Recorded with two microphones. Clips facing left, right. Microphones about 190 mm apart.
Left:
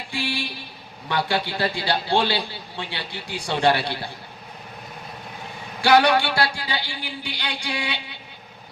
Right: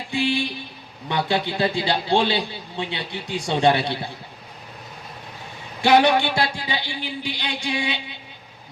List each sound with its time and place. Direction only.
0.1 s a man's voice: 20° right (ahead or behind)
5.8 s a man's voice: 20° right (ahead or behind)